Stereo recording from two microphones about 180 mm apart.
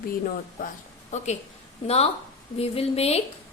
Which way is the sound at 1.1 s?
40° left (ahead or behind).